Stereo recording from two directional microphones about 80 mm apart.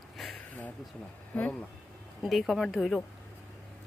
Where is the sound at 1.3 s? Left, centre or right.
Centre.